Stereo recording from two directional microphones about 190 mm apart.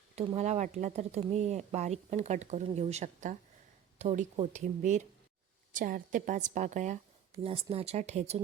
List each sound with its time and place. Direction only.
0.2 s speech: 35° right (ahead or behind)